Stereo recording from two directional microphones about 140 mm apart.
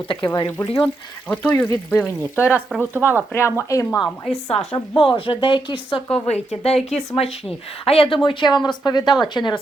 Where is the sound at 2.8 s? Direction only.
15° right (ahead or behind).